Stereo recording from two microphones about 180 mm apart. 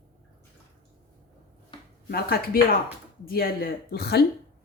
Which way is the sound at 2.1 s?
55° left (ahead or behind).